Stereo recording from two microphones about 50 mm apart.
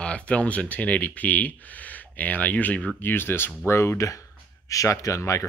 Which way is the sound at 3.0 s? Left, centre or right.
Left.